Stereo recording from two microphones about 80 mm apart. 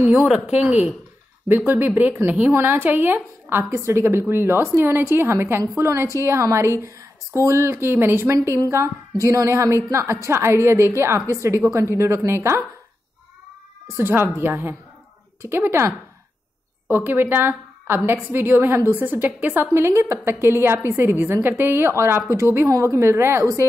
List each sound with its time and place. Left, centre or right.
0.0 s a woman's voice: right
13.9 s a woman's voice: right
16.9 s a woman's voice: right